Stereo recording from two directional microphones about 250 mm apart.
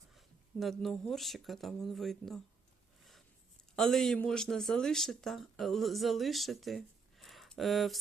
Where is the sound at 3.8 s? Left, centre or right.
Centre.